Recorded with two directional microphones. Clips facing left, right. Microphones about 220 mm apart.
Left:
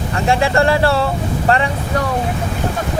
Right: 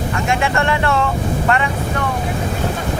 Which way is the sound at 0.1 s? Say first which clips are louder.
Left 5 dB; 35° left (ahead or behind).